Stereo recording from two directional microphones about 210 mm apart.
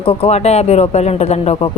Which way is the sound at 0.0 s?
25° left (ahead or behind).